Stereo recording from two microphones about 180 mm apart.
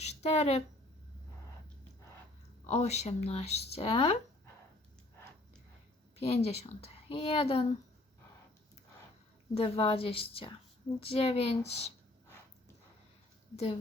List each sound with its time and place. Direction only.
0.0 s speech: 35° left (ahead or behind)
2.6 s speech: 35° left (ahead or behind)
6.1 s speech: 35° left (ahead or behind)
9.6 s speech: 30° left (ahead or behind)